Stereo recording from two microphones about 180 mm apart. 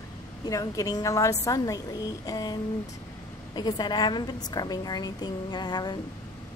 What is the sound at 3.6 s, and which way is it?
A woman's voice, 25° left (ahead or behind).